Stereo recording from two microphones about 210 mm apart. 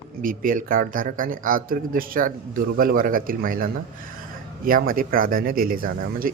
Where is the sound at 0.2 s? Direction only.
40° right (ahead or behind).